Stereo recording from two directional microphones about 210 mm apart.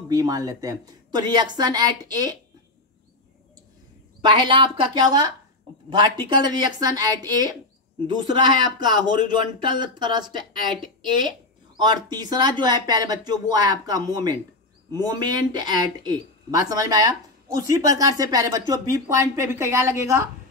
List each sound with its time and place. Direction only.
0.1 s speech: 15° right (ahead or behind)
4.2 s speech: 25° right (ahead or behind)